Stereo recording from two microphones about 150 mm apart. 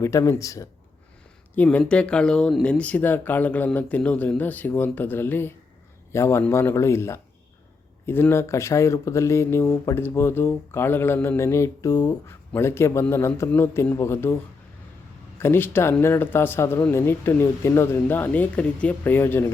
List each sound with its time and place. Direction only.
0.0 s speech: 20° left (ahead or behind)
1.5 s speech: 10° left (ahead or behind)
15.4 s speech: 15° left (ahead or behind)